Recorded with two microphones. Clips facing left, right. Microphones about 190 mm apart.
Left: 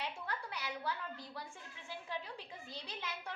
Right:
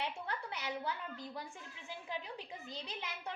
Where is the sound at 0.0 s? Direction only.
25° right (ahead or behind).